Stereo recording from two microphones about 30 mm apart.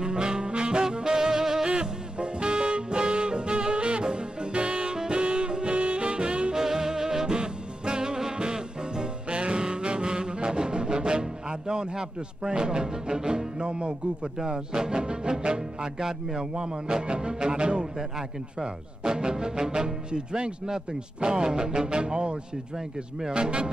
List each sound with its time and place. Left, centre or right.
0.0 s saxophone: right
0.5 s music: right
1.7 s music: right
4.9 s music: right
6.5 s music: centre
11.6 s speech: right
16.0 s speech: centre; by 23.7 s right